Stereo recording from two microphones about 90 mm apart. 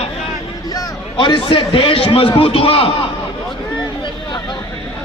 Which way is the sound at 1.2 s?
65° left (ahead or behind).